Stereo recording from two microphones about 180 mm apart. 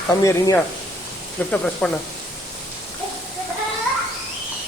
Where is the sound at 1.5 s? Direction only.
5° left (ahead or behind).